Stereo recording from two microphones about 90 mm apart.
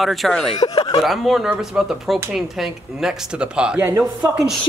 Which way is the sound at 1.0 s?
Centre (ahead or behind).